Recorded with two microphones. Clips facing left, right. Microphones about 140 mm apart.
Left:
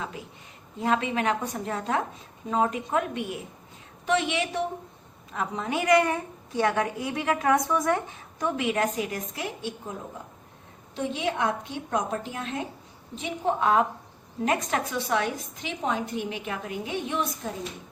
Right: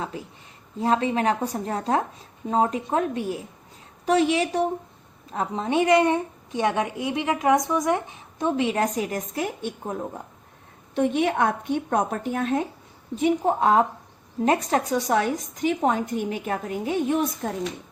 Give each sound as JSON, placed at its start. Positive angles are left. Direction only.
{"t": 0.8, "sound": "a woman's voice", "side_deg": -35}
{"t": 10.9, "sound": "a woman's voice", "side_deg": -55}
{"t": 13.6, "sound": "a woman's voice", "side_deg": -35}